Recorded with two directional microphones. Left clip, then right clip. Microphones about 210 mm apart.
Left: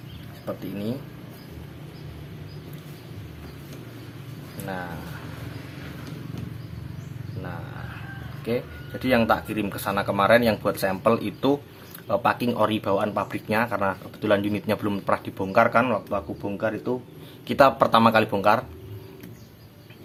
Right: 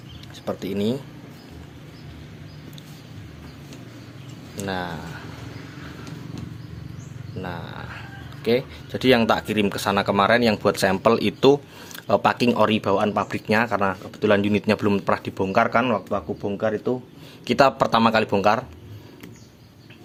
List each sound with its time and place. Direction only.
0.4 s speech: 40° right (ahead or behind)
4.6 s speech: 45° right (ahead or behind)
7.4 s a sound: 40° right (ahead or behind)
8.4 s speech: 40° right (ahead or behind)